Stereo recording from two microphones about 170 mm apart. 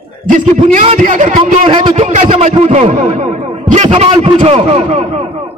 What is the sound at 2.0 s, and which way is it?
A man's voice, 45° right (ahead or behind).